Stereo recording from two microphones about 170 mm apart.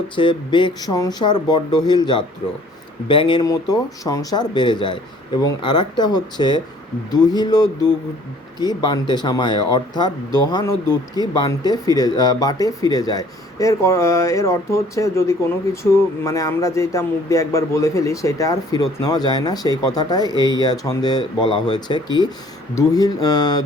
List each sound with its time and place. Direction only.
0.2 s speech: 30° left (ahead or behind)